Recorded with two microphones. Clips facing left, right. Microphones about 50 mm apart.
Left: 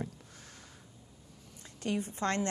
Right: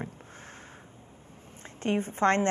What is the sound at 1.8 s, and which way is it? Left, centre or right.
Speech, right.